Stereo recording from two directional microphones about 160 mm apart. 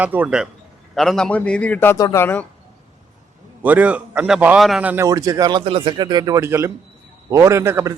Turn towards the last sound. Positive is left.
turn(degrees=-15)  # may be behind; listen again after turning